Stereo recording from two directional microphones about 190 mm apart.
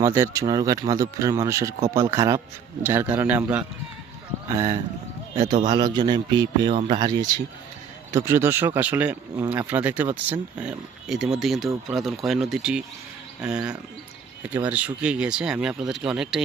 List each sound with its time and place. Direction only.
0.0 s a man's voice: 15° right (ahead or behind)